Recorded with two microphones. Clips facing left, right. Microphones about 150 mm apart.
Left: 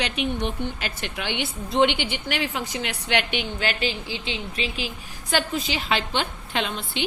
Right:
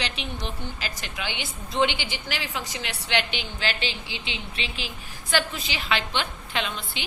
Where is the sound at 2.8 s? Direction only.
30° right (ahead or behind).